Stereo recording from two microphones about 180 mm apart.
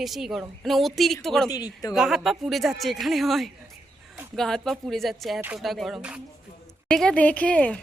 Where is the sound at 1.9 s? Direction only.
Centre (ahead or behind).